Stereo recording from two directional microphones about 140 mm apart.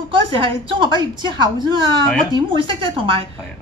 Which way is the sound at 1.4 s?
35° right (ahead or behind).